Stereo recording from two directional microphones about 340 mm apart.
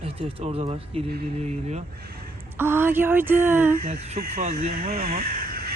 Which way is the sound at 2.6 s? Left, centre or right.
Centre.